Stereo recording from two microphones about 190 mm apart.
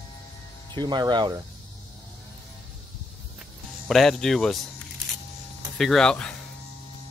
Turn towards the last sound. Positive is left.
turn(degrees=5)  # may be behind; listen again after turning